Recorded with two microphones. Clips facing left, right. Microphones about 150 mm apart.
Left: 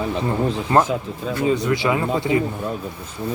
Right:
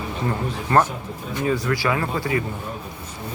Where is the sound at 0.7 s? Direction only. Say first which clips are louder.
Even; 20° left (ahead or behind).